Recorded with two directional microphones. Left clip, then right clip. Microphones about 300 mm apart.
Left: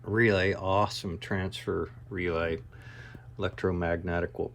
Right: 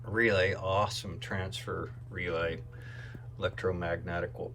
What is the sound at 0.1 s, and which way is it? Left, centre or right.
Speech, left.